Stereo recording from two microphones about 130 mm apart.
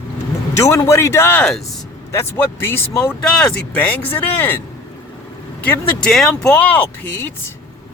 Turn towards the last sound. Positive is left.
turn(degrees=10)  # may be behind; listen again after turning